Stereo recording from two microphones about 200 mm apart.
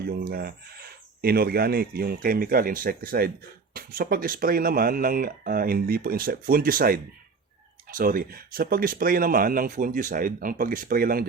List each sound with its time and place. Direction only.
0.3 s speech: 50° right (ahead or behind)